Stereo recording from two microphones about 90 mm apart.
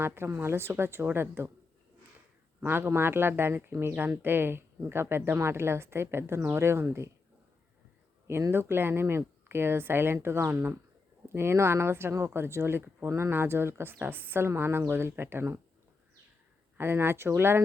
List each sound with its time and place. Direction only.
0.0 s speech: 25° right (ahead or behind)
2.6 s speech: 25° right (ahead or behind)
8.3 s speech: 30° right (ahead or behind)
16.7 s speech: 25° right (ahead or behind)